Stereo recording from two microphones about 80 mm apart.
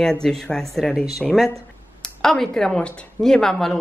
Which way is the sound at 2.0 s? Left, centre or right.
Centre.